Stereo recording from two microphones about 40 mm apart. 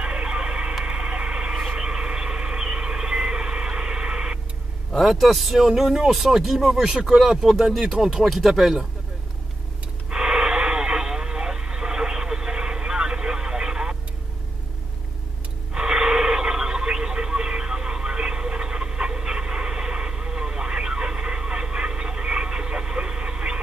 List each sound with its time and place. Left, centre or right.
0.0 s music: right
0.8 s insect: right
5.0 s speech: centre
10.0 s radio: right
15.7 s a sound: right